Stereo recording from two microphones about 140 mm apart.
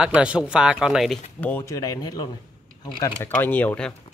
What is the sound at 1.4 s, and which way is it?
Speech, 15° left (ahead or behind).